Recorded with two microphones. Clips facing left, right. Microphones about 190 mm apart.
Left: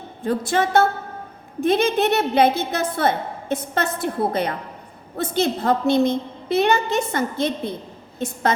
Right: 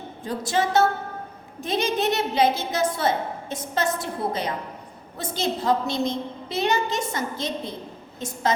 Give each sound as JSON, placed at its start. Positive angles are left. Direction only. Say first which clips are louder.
{"t": 0.3, "sound": "a woman's voice", "louder": "left 4 dB", "side_deg": 60}